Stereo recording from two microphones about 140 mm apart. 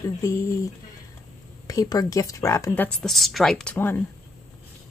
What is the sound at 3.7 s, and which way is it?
Speech, 15° left (ahead or behind).